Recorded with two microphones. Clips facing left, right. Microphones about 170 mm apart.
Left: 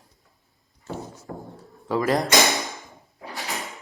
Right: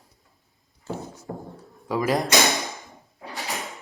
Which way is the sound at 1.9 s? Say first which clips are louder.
Left 1 dB; 15° right (ahead or behind).